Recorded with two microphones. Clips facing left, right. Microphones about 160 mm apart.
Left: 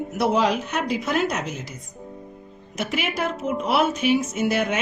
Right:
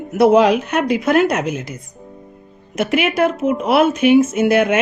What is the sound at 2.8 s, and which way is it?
A woman's voice, 65° right (ahead or behind).